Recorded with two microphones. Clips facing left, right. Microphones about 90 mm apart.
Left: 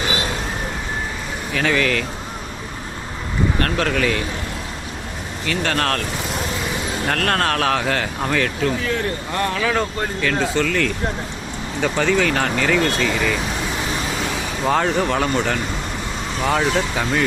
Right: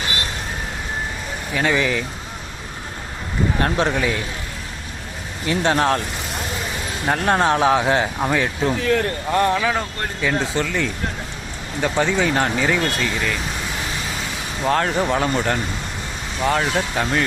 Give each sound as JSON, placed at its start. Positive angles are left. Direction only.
{"t": 1.7, "sound": "speech", "side_deg": -15}
{"t": 3.6, "sound": "speech", "side_deg": -20}
{"t": 5.5, "sound": "speech", "side_deg": -20}
{"t": 7.1, "sound": "speech", "side_deg": -15}
{"t": 8.8, "sound": "speech", "side_deg": -45}
{"t": 9.4, "sound": "speech", "side_deg": -25}
{"t": 10.2, "sound": "speech", "side_deg": -10}
{"t": 14.6, "sound": "speech", "side_deg": 5}